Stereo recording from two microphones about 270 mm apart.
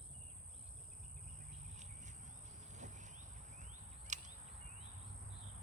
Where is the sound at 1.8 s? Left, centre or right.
Right.